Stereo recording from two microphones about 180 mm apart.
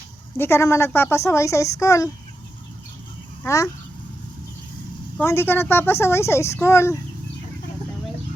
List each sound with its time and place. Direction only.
0.3 s a woman's voice: 15° left (ahead or behind)
3.4 s speech: 15° left (ahead or behind)
5.1 s a woman's voice: 15° left (ahead or behind)